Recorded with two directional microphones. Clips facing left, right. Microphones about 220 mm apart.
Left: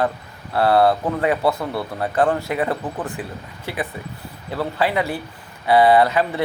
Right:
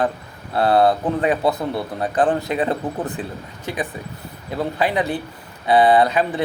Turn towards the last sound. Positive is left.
turn(degrees=-15)  # may be behind; listen again after turning